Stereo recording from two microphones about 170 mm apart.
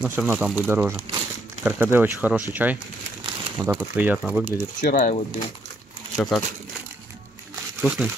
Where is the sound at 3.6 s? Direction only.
20° right (ahead or behind).